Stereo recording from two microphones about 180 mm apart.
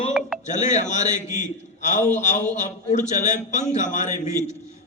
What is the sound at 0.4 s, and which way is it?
A man's voice, 40° left (ahead or behind).